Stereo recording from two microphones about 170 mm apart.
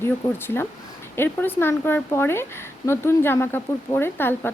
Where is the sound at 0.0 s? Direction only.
15° left (ahead or behind).